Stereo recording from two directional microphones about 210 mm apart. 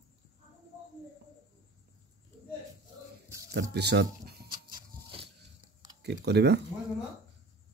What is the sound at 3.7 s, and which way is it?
Speech, 50° right (ahead or behind).